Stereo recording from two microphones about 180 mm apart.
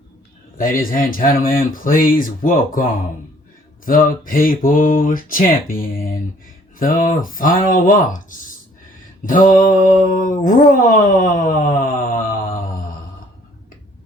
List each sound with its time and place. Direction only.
0.6 s speech: 50° left (ahead or behind)
3.8 s speech: 50° left (ahead or behind)
8.9 s mantra: 50° left (ahead or behind)
10.4 s speech: 45° left (ahead or behind)